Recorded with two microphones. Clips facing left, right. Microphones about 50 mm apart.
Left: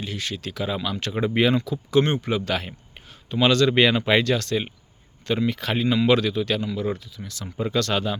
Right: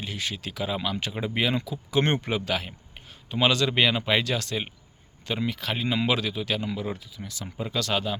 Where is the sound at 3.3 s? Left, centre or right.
Centre.